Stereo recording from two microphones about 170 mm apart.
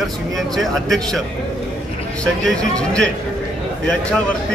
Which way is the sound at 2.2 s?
5° left (ahead or behind).